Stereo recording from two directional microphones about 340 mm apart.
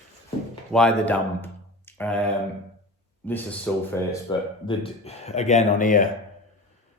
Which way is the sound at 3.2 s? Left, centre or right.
Centre.